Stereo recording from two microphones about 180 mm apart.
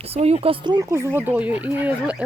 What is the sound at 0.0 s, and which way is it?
Speech, 35° right (ahead or behind).